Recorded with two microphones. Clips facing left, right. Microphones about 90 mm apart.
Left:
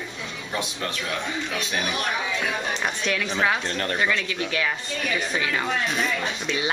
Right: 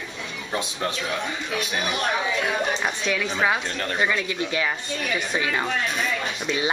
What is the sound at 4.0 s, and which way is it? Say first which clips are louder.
Speech: right 3 dB; 15° right (ahead or behind).